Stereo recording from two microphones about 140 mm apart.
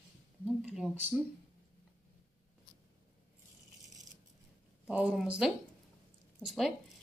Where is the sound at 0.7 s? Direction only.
5° right (ahead or behind).